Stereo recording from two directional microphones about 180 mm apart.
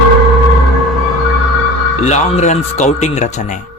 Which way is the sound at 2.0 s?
40° left (ahead or behind).